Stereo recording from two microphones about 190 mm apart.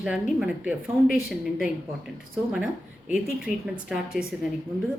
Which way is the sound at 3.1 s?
5° right (ahead or behind).